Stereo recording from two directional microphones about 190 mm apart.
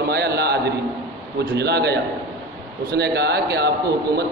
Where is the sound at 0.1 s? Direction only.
60° right (ahead or behind).